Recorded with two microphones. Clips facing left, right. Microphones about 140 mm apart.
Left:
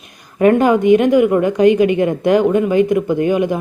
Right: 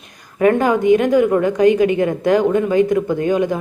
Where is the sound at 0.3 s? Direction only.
20° left (ahead or behind).